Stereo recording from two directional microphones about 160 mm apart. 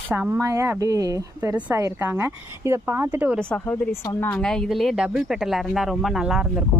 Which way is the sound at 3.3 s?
5° left (ahead or behind).